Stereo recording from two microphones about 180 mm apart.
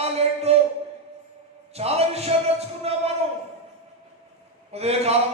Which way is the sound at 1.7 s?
35° right (ahead or behind).